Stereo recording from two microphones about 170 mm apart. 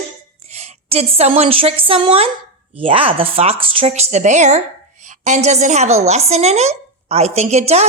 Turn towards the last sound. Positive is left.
turn(degrees=-40)  # may be behind; listen again after turning